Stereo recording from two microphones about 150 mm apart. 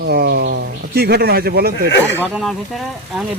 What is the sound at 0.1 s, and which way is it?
A man's voice, 90° right.